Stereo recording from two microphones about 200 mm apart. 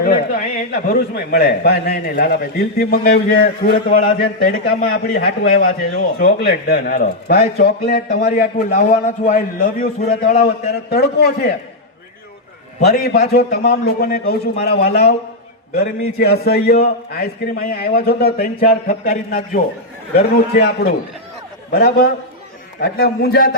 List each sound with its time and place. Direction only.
0.0 s a man's voice: 45° left (ahead or behind)
12.8 s a man's voice: 50° left (ahead or behind)